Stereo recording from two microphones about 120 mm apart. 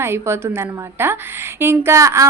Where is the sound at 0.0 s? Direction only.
20° right (ahead or behind).